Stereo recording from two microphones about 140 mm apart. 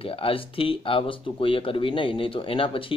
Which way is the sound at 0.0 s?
40° left (ahead or behind).